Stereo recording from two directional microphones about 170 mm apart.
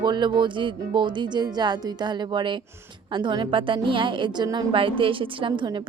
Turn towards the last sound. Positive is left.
turn(degrees=-30)  # may be behind; listen again after turning